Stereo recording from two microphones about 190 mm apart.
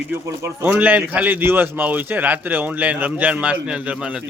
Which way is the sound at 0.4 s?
10° right (ahead or behind).